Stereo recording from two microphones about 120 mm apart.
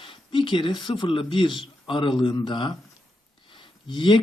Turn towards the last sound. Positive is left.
turn(degrees=40)  # may be behind; listen again after turning